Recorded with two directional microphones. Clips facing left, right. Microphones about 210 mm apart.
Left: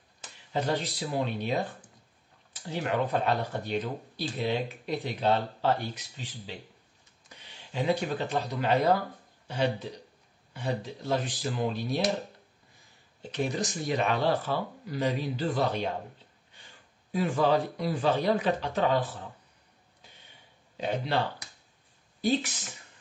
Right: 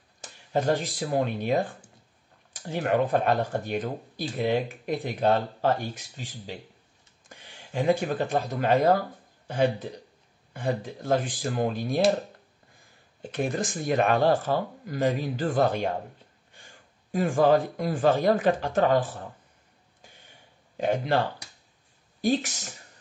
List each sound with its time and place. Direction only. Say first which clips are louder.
0.2 s speech: right 5 dB; 45° right (ahead or behind)
13.2 s speech: right 2 dB; 50° right (ahead or behind)
20.7 s speech: right 5 dB; 50° right (ahead or behind)
22.3 s speech: right 2 dB; 45° right (ahead or behind)